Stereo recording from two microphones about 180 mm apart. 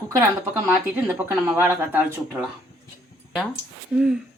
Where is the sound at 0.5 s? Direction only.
15° right (ahead or behind).